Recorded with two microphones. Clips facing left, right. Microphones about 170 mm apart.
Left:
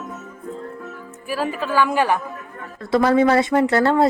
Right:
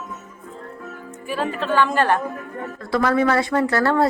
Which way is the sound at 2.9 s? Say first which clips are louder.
Left 3 dB; 25° left (ahead or behind).